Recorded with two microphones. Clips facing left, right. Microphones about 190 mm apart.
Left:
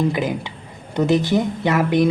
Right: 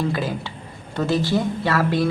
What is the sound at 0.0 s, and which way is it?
Speech, 20° left (ahead or behind).